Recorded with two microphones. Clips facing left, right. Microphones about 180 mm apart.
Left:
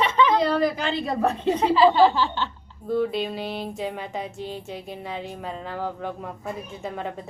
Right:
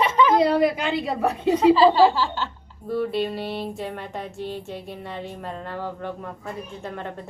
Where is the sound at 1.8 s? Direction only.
35° right (ahead or behind).